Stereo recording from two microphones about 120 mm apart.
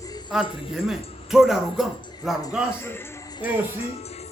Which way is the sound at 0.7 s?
5° right (ahead or behind).